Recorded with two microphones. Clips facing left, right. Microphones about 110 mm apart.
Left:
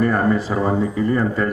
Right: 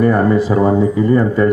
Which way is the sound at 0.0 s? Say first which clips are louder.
Right 5 dB; 25° right (ahead or behind).